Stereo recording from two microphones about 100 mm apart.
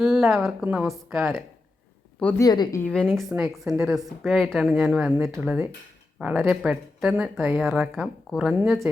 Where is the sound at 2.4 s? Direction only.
45° left (ahead or behind).